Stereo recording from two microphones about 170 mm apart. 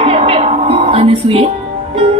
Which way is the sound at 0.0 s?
35° right (ahead or behind).